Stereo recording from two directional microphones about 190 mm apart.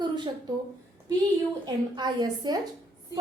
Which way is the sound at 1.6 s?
20° right (ahead or behind).